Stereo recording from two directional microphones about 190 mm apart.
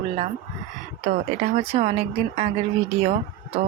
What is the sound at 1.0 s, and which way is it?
Speech, 35° right (ahead or behind).